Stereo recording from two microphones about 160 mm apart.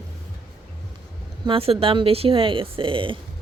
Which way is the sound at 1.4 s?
35° right (ahead or behind).